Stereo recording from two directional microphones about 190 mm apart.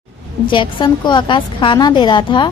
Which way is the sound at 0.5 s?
25° left (ahead or behind).